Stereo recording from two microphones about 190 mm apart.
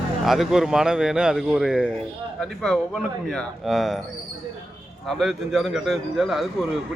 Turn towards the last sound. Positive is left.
turn(degrees=0)  # may be behind; listen again after turning